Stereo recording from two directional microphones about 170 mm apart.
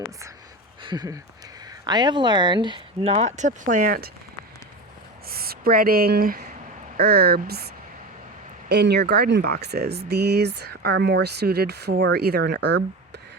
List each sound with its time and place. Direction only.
0.8 s speech: 25° right (ahead or behind); by 4.1 s 55° right (ahead or behind)
5.3 s speech: 65° right (ahead or behind)
8.7 s speech: 75° right (ahead or behind)